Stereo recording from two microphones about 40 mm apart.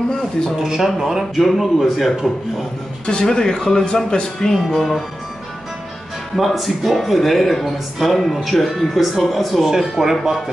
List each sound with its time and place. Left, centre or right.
0.6 s speech: centre
3.1 s speech: centre
4.5 s speech: centre
6.3 s speech: centre